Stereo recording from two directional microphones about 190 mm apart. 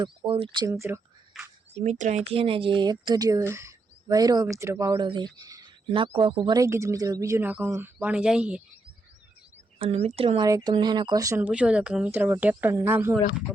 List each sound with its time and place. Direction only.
0.0 s speech: 30° right (ahead or behind)
0.7 s speech: 15° right (ahead or behind)
1.7 s speech: 35° right (ahead or behind)
6.6 s speech: 15° right (ahead or behind)
9.7 s speech: 30° right (ahead or behind)
10.4 s speech: 20° right (ahead or behind)